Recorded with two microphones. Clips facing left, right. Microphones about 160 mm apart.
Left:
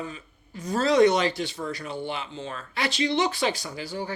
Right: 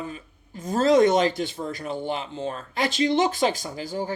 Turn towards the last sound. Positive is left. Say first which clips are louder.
# right 3 dB
turn(degrees=-45)  # may be behind; listen again after turning